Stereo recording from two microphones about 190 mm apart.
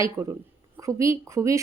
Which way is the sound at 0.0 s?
15° right (ahead or behind).